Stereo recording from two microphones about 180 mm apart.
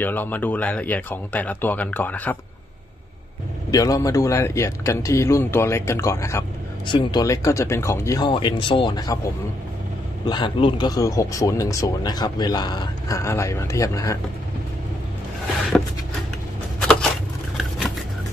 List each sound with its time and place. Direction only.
0.0 s speech: 10° left (ahead or behind)
3.7 s speech: 20° left (ahead or behind)
10.2 s speech: 25° left (ahead or behind)
16.8 s a sound: 5° left (ahead or behind)
17.6 s vehicle: centre (ahead or behind)